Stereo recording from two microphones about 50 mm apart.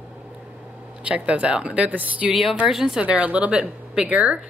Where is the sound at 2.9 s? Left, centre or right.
Right.